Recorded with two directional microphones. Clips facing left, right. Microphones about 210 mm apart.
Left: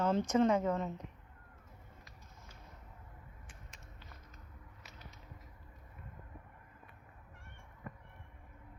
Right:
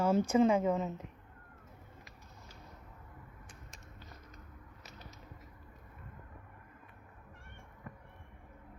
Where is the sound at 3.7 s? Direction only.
40° right (ahead or behind).